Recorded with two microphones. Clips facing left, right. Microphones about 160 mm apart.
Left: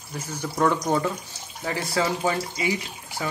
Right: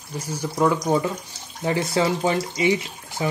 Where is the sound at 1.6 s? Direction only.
20° right (ahead or behind).